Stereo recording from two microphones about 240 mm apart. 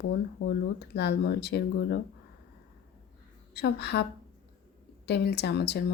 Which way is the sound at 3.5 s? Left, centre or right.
Left.